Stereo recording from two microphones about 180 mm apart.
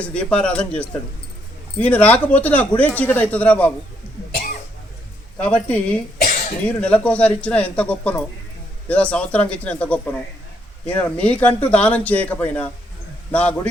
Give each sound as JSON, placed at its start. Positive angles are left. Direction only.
{"t": 0.0, "sound": "speech", "side_deg": 5}
{"t": 5.4, "sound": "speech", "side_deg": 10}
{"t": 6.2, "sound": "cough", "side_deg": 55}
{"t": 6.7, "sound": "speech", "side_deg": 5}